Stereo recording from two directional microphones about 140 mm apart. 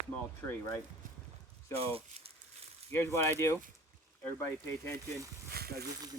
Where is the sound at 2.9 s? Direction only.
20° left (ahead or behind).